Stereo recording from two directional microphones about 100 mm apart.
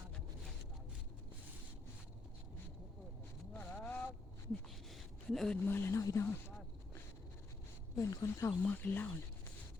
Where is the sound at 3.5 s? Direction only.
15° left (ahead or behind).